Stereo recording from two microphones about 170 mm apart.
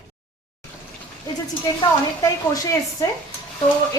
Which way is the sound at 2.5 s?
20° left (ahead or behind).